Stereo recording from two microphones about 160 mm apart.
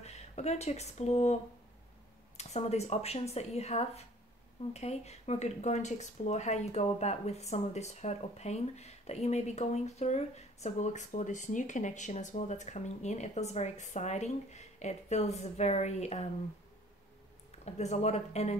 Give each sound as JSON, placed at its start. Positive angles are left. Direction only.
{"t": 0.0, "sound": "speech", "side_deg": 40}
{"t": 17.6, "sound": "speech", "side_deg": 45}